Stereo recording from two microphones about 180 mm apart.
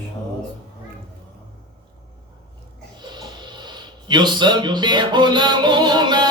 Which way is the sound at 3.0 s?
25° right (ahead or behind).